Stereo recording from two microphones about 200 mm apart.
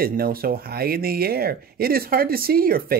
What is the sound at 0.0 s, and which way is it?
Speech, 50° right (ahead or behind).